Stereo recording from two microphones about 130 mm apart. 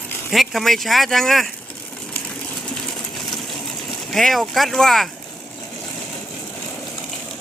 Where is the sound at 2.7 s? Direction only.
Centre (ahead or behind).